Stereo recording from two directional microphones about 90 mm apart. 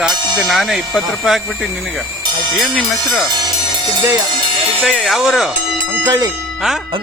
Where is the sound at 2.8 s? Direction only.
Centre (ahead or behind).